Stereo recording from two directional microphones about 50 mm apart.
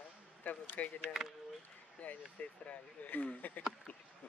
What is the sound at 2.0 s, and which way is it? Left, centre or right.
Speech, left.